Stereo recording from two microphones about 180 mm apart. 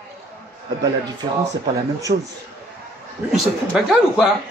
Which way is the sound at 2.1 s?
40° right (ahead or behind).